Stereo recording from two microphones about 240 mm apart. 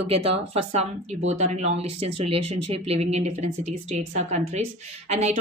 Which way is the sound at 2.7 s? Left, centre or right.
Right.